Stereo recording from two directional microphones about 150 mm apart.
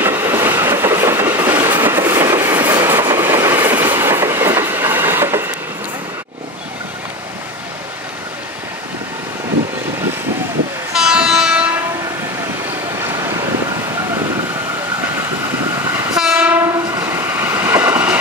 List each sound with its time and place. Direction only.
0.0 s train: 15° right (ahead or behind)
10.9 s train: 5° right (ahead or behind)
16.2 s train: 5° right (ahead or behind)